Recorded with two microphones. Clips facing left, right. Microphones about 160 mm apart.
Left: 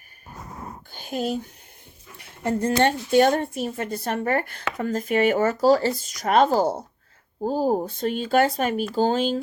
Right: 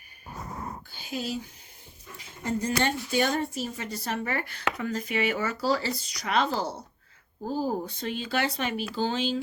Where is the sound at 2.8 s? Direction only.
55° left (ahead or behind).